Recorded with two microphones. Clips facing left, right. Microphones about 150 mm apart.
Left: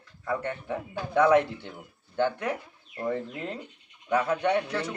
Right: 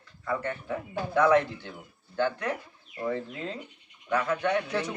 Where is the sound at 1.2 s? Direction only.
15° left (ahead or behind).